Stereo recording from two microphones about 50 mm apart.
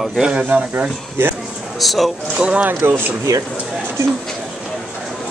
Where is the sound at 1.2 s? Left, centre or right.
Right.